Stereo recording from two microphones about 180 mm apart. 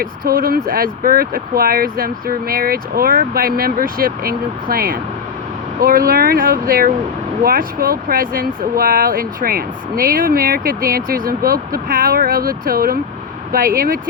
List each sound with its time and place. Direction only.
0.0 s speech: 55° right (ahead or behind)